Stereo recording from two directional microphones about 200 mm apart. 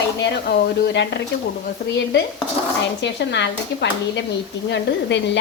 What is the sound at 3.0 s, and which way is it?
A woman's voice, 60° left (ahead or behind).